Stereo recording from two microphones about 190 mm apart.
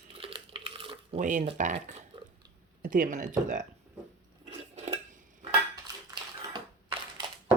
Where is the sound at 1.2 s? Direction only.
40° right (ahead or behind).